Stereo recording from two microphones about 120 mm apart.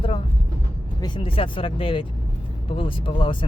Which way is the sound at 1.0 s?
45° left (ahead or behind).